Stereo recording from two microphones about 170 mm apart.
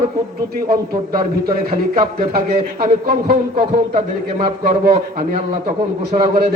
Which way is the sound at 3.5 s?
30° right (ahead or behind).